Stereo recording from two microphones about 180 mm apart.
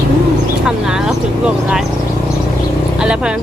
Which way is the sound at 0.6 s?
5° right (ahead or behind).